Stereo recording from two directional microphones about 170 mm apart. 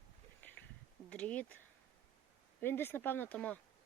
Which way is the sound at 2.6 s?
10° left (ahead or behind).